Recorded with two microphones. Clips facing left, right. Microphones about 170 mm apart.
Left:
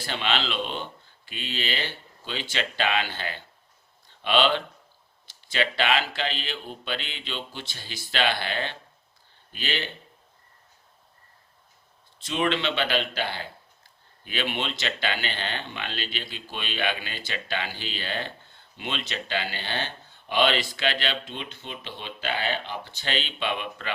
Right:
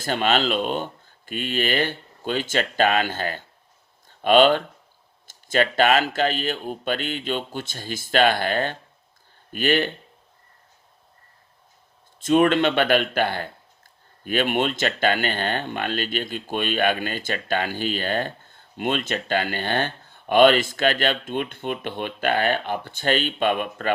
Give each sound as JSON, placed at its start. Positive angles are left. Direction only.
{"t": 0.0, "sound": "speech", "side_deg": -45}
{"t": 12.2, "sound": "speech", "side_deg": -50}